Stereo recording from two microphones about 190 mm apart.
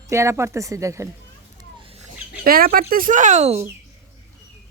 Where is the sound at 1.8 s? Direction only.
30° right (ahead or behind).